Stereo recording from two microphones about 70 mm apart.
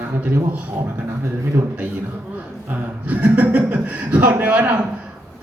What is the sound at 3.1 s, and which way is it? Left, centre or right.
A man's voice, right.